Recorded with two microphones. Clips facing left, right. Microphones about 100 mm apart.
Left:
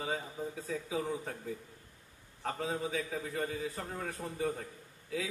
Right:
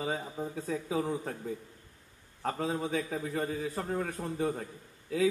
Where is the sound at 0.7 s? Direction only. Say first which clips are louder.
Right 4 dB; 40° right (ahead or behind).